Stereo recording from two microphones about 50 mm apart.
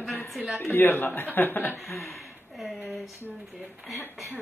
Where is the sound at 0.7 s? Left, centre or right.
Left.